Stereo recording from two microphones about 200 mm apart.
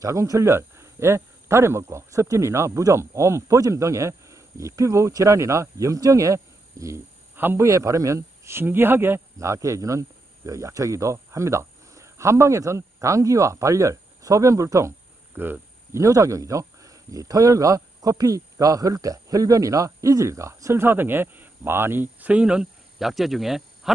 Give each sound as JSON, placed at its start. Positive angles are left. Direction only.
{"t": 0.0, "sound": "speech", "side_deg": -15}